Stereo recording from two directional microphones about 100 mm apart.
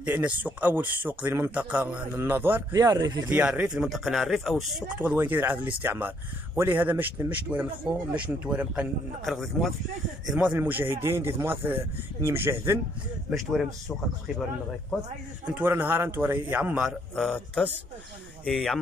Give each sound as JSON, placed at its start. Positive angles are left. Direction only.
{"t": 0.0, "sound": "speech", "side_deg": -15}
{"t": 2.7, "sound": "speech", "side_deg": -35}
{"t": 3.3, "sound": "speech", "side_deg": -15}
{"t": 4.9, "sound": "speech", "side_deg": -15}
{"t": 9.2, "sound": "speech", "side_deg": 0}
{"t": 10.2, "sound": "speech", "side_deg": -10}
{"t": 13.3, "sound": "speech", "side_deg": 0}
{"t": 15.6, "sound": "speech", "side_deg": -25}
{"t": 17.1, "sound": "speech", "side_deg": 10}